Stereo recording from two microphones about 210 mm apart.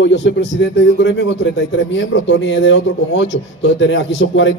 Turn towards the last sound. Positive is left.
turn(degrees=60)  # may be behind; listen again after turning